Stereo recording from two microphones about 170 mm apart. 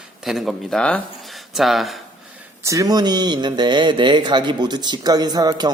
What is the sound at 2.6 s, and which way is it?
Speech, 20° right (ahead or behind).